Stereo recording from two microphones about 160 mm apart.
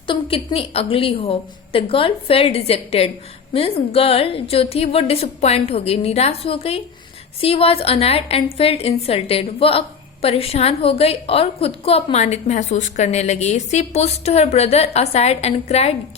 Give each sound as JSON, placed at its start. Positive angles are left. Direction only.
{"t": 0.1, "sound": "a woman's voice", "side_deg": 35}